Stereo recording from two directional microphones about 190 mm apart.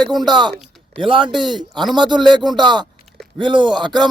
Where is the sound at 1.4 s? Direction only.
Centre (ahead or behind).